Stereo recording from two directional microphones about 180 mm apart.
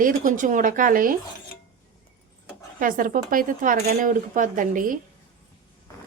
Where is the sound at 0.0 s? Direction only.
50° right (ahead or behind).